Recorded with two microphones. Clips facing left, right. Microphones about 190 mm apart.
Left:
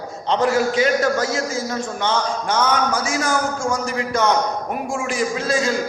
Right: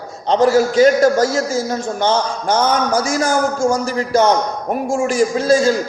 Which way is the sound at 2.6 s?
40° right (ahead or behind).